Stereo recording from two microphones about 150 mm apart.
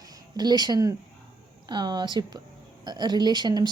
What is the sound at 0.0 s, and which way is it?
Speech, 25° right (ahead or behind).